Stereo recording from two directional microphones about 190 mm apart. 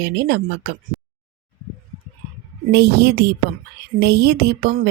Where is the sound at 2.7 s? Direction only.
60° right (ahead or behind).